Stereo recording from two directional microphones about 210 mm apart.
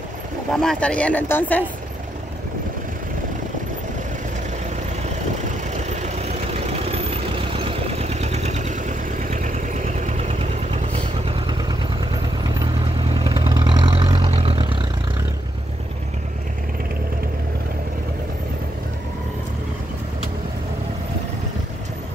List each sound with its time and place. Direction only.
0.6 s speech: 5° left (ahead or behind)
5.7 s vehicle: 35° right (ahead or behind)
13.1 s vehicle: 25° right (ahead or behind)